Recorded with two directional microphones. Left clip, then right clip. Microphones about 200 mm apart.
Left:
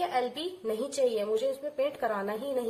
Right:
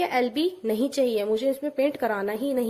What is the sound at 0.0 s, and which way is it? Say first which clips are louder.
A woman's voice: right 6 dB; 40° right (ahead or behind).